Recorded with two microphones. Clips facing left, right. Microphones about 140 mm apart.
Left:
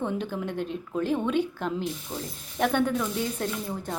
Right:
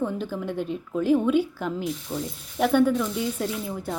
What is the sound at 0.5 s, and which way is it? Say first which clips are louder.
A woman's voice: right 2 dB; 5° right (ahead or behind).